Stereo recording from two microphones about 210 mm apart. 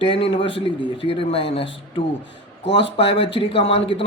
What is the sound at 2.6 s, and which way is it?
Speech, 55° left (ahead or behind).